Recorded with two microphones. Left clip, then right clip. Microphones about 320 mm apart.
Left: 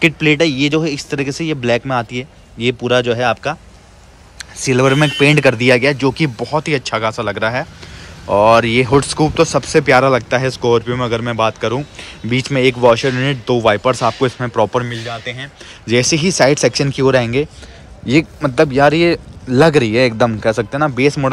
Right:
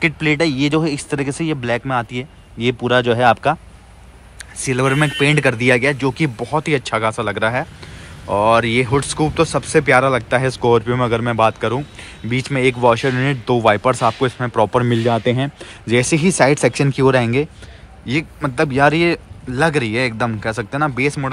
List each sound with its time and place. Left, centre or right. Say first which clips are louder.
0.0 s speech: left 4 dB; centre